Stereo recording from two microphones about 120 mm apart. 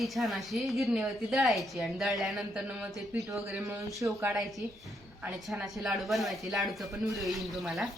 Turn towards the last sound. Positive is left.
turn(degrees=0)  # may be behind; listen again after turning